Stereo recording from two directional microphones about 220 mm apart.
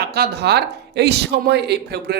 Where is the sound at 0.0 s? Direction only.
45° right (ahead or behind).